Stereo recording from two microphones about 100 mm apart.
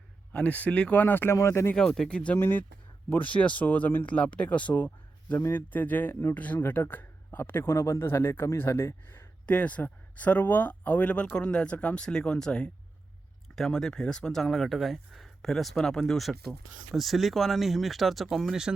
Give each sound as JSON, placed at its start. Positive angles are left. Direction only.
{"t": 0.3, "sound": "speech", "side_deg": 15}
{"t": 1.7, "sound": "speech", "side_deg": 5}
{"t": 9.5, "sound": "speech", "side_deg": 15}